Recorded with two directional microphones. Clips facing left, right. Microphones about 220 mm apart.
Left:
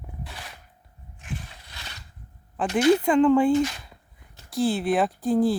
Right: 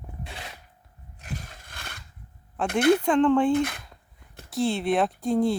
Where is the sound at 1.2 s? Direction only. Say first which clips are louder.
Left 1 dB; 40° right (ahead or behind).